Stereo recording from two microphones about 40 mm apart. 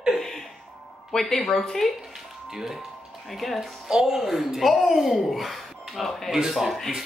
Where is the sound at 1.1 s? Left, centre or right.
Centre.